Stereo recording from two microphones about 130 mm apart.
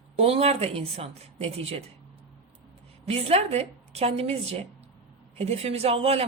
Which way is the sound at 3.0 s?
55° right (ahead or behind).